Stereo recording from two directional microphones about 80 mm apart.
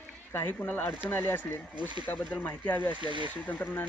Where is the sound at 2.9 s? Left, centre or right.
Right.